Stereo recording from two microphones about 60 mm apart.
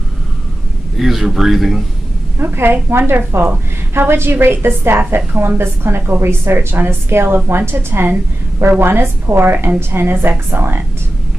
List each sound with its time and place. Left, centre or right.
0.9 s speech: centre
2.3 s a woman's voice: right